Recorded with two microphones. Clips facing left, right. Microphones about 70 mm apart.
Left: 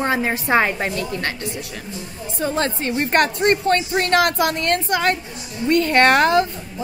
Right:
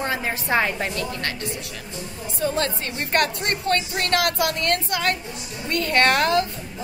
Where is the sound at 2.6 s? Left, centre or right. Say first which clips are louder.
Left 4 dB; left.